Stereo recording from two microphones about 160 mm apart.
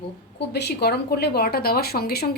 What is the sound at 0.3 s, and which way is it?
Speech, 90° left.